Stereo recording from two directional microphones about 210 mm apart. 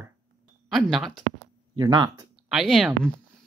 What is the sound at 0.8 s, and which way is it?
Speech, centre (ahead or behind).